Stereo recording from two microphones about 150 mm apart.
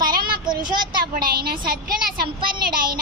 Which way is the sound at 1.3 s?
90° right.